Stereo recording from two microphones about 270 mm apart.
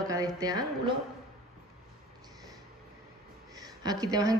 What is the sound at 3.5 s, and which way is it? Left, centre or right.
Speech, centre.